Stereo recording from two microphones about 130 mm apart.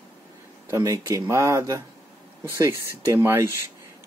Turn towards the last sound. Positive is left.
turn(degrees=-20)  # may be behind; listen again after turning